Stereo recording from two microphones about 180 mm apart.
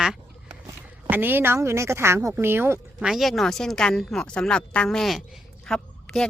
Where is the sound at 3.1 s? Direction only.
Centre (ahead or behind).